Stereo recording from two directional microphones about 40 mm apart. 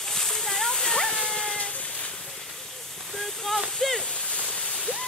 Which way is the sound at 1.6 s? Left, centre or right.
Left.